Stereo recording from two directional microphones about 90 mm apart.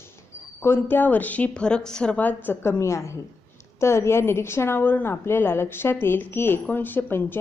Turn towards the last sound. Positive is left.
turn(degrees=25)  # may be behind; listen again after turning